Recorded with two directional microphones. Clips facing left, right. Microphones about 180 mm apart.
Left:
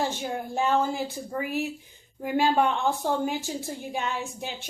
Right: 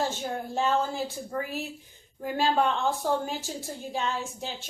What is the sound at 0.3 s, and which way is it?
A woman's voice, 15° left (ahead or behind).